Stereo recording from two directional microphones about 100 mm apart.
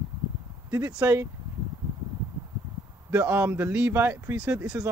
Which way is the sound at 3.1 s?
15° right (ahead or behind).